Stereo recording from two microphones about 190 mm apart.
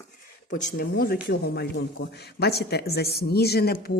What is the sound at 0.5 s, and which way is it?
A woman's voice, 50° left (ahead or behind).